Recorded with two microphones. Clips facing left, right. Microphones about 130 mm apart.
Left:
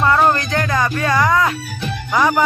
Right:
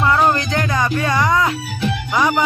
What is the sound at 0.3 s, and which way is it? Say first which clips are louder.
Music: left 1 dB; 15° right (ahead or behind).